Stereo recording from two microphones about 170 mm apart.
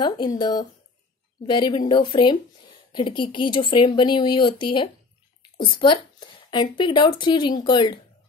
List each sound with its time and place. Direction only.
0.0 s speech: 25° left (ahead or behind)